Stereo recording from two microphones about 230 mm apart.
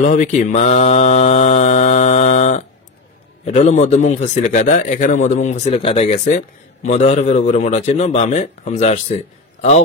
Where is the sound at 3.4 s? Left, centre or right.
Left.